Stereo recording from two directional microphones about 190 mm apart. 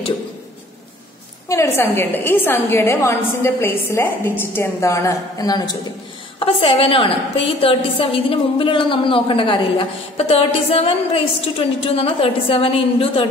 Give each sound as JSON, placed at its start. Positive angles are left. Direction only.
{"t": 1.5, "sound": "a woman's voice", "side_deg": 15}